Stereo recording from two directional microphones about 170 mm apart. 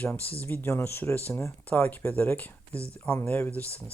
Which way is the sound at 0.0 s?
10° left (ahead or behind).